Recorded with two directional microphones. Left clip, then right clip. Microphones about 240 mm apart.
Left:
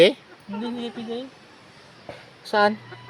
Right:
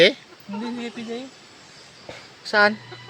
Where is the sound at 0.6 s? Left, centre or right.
Centre.